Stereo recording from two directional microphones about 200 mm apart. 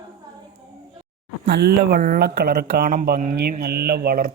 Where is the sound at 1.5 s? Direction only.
55° right (ahead or behind).